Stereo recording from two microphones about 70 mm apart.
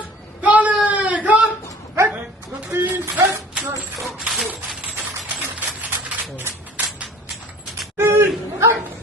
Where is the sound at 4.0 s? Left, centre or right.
Centre.